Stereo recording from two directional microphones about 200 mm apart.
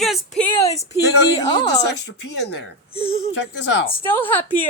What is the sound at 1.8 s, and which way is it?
Speech, 60° left (ahead or behind).